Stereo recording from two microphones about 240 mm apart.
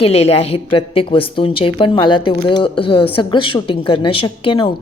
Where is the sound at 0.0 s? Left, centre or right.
Left.